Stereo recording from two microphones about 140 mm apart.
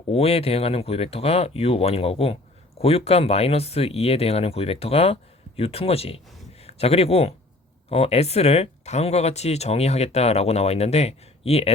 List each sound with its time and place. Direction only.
0.1 s speech: 45° left (ahead or behind)